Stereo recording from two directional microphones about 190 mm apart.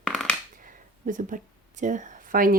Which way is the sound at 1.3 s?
45° right (ahead or behind).